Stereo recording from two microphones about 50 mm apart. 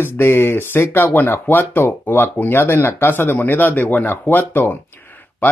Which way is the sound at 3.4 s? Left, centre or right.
Left.